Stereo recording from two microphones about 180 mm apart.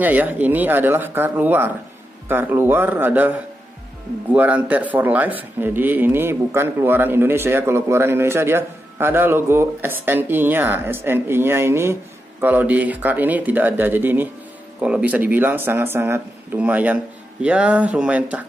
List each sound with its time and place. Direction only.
0.0 s speech: 10° right (ahead or behind)